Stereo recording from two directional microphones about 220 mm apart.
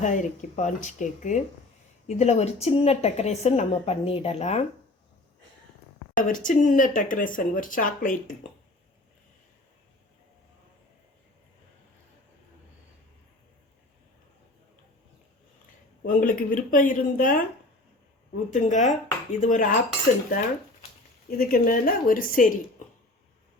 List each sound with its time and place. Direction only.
0.0 s a woman's voice: 35° left (ahead or behind)
6.2 s speech: 35° left (ahead or behind)
16.0 s speech: 40° left (ahead or behind)
18.5 s speech: 35° left (ahead or behind)
21.2 s speech: 40° left (ahead or behind)